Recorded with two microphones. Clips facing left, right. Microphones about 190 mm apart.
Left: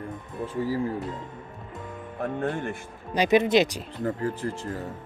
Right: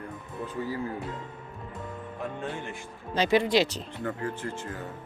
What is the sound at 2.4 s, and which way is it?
Speech, 55° left (ahead or behind).